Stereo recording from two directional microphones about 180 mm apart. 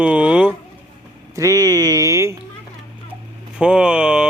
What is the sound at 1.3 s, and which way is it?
Speech, 20° right (ahead or behind).